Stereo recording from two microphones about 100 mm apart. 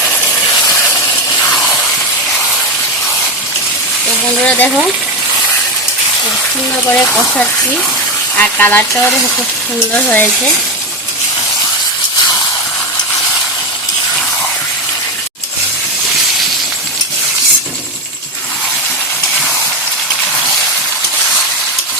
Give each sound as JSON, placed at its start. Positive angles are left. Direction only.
{"t": 4.4, "sound": "speech", "side_deg": 15}
{"t": 6.8, "sound": "speech", "side_deg": 10}
{"t": 10.1, "sound": "speech", "side_deg": 10}